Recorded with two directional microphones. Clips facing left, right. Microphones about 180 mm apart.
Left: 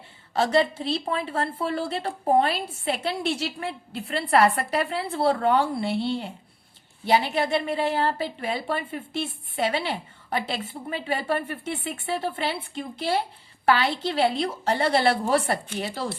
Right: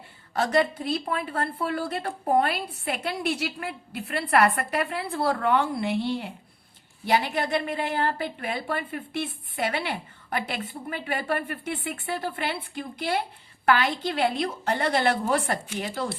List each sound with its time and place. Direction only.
0.3 s a woman's voice: 25° left (ahead or behind)